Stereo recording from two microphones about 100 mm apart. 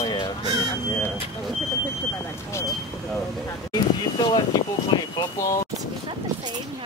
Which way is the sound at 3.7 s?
45° left (ahead or behind).